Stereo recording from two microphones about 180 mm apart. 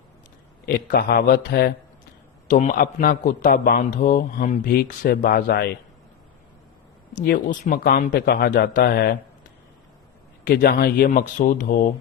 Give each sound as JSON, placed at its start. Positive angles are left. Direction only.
{"t": 0.6, "sound": "speech", "side_deg": 55}
{"t": 2.5, "sound": "a man's voice", "side_deg": 45}
{"t": 7.3, "sound": "speech", "side_deg": 45}
{"t": 10.4, "sound": "a man's voice", "side_deg": 55}